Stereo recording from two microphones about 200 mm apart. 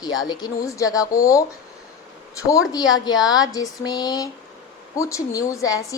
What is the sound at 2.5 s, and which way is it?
A woman's voice, 20° left (ahead or behind).